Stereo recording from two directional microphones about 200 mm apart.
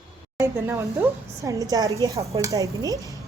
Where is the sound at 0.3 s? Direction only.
15° right (ahead or behind).